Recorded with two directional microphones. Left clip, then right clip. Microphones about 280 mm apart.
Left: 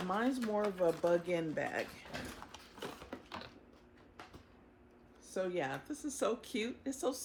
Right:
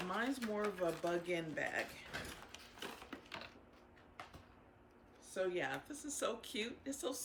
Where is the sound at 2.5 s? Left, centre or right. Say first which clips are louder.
Left 3 dB; centre.